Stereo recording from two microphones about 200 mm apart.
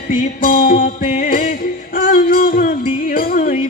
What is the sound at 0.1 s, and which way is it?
Music, 45° left (ahead or behind).